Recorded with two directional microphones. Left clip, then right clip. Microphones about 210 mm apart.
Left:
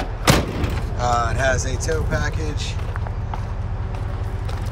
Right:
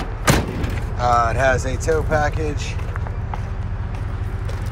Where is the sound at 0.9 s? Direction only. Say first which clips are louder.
Right 4 dB; 10° left (ahead or behind).